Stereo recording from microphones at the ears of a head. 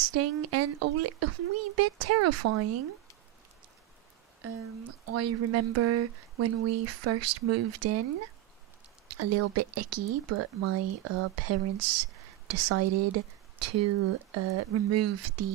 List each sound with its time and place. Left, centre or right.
0.0 s speech: right
4.4 s speech: right